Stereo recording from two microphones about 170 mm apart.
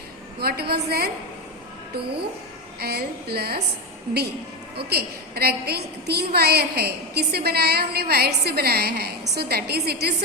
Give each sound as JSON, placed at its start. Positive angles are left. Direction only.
{"t": 0.3, "sound": "a woman's voice", "side_deg": -70}
{"t": 2.8, "sound": "a woman's voice", "side_deg": -70}
{"t": 4.8, "sound": "a woman's voice", "side_deg": -70}